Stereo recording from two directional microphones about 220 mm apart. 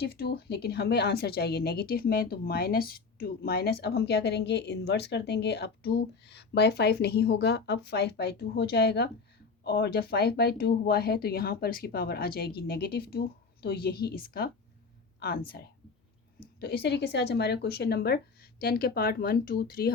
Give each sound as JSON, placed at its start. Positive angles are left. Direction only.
{"t": 0.0, "sound": "a woman's voice", "side_deg": 45}